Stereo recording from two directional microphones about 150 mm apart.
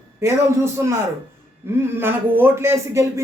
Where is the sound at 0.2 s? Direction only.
15° right (ahead or behind).